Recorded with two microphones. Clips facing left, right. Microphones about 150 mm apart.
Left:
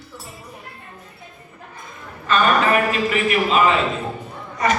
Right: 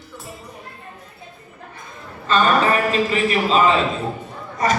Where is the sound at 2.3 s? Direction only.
30° right (ahead or behind).